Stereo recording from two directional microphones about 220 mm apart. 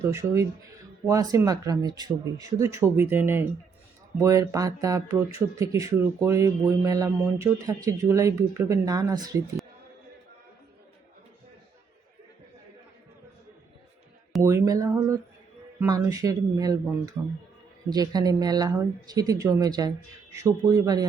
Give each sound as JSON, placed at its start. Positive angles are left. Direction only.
{"t": 0.0, "sound": "speech", "side_deg": -15}
{"t": 14.4, "sound": "a sound", "side_deg": -15}
{"t": 15.8, "sound": "speech", "side_deg": -15}